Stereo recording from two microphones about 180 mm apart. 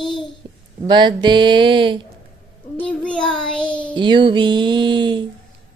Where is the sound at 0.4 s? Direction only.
25° right (ahead or behind).